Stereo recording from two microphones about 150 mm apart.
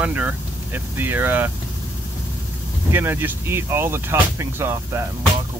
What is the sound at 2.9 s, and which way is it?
Speech, 15° right (ahead or behind).